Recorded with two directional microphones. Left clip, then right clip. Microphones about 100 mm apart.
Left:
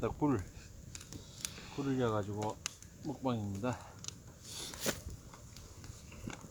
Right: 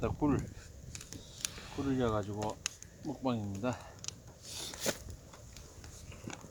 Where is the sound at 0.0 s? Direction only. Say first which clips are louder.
Right 1 dB; 20° left (ahead or behind).